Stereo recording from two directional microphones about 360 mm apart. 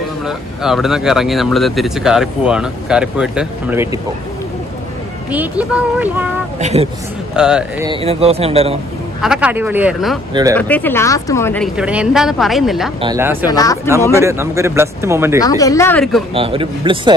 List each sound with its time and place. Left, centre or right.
0.6 s speech: centre
5.3 s speech: centre
6.6 s speech: centre
7.3 s speech: centre
7.9 s speech: centre
9.2 s speech: centre
10.5 s speech: centre
13.5 s speech: centre
14.1 s speech: centre
15.4 s speech: centre
16.3 s speech: centre